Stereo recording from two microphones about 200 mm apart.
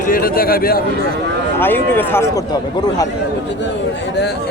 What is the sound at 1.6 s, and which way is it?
A man's voice, 10° left (ahead or behind).